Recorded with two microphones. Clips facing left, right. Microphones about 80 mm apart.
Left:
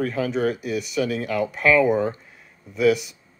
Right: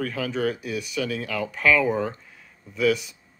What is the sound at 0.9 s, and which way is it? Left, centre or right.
Speech, centre.